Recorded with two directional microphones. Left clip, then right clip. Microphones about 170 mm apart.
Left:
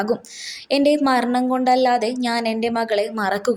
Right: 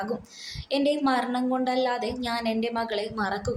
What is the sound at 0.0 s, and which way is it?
A woman's voice, 50° left (ahead or behind).